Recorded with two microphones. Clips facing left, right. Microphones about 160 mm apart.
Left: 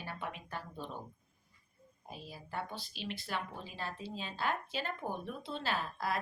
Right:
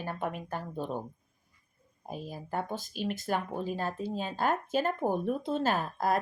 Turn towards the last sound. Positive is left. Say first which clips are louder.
# right 8 dB
turn(degrees=-45)  # may be behind; listen again after turning